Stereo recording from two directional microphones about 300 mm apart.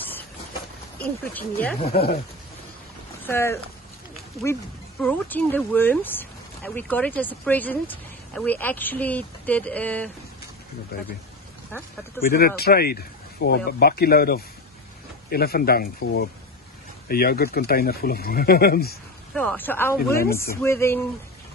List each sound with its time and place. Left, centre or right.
0.9 s speech: centre
1.9 s speech: left
3.3 s speech: centre
5.0 s speech: centre
10.9 s speech: left
12.2 s speech: left
19.3 s speech: centre